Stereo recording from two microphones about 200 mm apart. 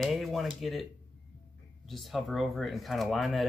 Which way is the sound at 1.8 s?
Centre (ahead or behind).